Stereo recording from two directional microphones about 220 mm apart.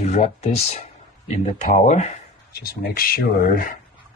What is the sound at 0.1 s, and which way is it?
Speech, 30° left (ahead or behind).